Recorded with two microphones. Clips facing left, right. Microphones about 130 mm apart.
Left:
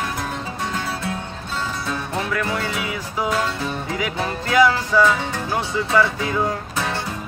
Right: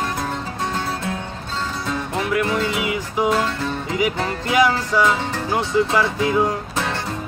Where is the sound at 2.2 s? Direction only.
15° right (ahead or behind).